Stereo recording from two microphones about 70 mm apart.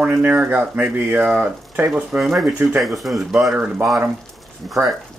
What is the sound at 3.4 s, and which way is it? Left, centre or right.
Speech, centre.